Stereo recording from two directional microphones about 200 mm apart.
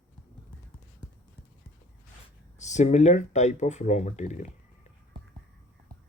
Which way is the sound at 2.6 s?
35° left (ahead or behind).